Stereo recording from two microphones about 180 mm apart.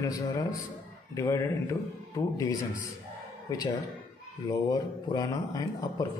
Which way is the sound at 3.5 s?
20° left (ahead or behind).